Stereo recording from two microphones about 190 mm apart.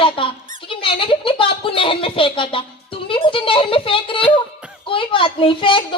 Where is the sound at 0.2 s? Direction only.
30° left (ahead or behind).